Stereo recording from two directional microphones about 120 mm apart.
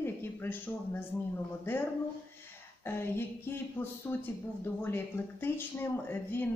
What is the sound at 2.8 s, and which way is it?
Speech, 20° left (ahead or behind).